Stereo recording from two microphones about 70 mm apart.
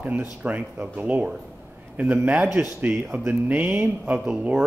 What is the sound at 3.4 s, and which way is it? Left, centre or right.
Speech, right.